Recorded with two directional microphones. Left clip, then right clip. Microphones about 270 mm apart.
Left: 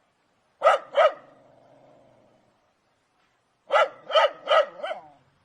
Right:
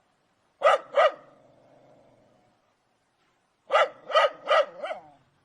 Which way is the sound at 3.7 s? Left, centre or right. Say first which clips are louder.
Left 1 dB; centre.